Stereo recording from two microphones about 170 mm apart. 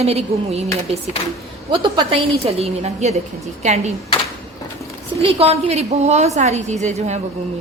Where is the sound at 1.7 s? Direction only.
30° right (ahead or behind).